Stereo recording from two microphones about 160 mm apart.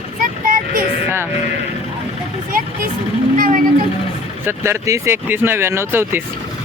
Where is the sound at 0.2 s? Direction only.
60° right (ahead or behind).